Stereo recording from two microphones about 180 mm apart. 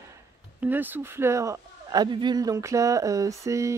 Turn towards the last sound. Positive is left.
turn(degrees=-15)  # may be behind; listen again after turning